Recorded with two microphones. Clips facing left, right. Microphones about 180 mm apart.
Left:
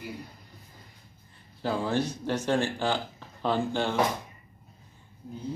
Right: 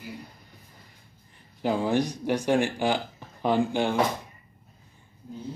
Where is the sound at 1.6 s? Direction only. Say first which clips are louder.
Right 3 dB; 15° right (ahead or behind).